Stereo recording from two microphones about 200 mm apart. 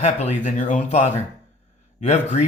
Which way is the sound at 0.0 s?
35° left (ahead or behind).